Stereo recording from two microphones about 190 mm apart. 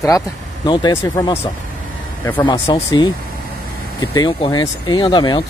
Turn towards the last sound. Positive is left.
turn(degrees=25)  # may be behind; listen again after turning